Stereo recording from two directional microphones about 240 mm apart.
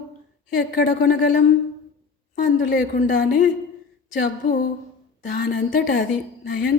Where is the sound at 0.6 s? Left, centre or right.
Left.